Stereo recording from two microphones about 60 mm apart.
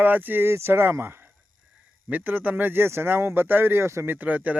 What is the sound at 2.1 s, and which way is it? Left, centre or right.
Speech, right.